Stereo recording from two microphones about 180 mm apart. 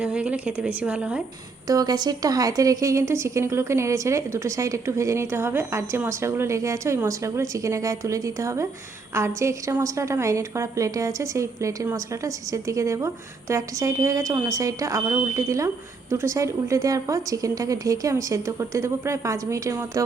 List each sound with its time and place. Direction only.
0.0 s a woman's voice: 5° right (ahead or behind)
1.6 s a woman's voice: 20° right (ahead or behind)